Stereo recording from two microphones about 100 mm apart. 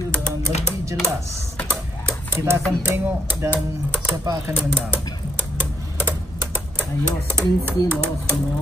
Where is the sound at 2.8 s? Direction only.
25° right (ahead or behind).